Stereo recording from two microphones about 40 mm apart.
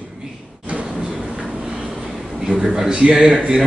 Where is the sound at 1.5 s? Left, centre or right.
Right.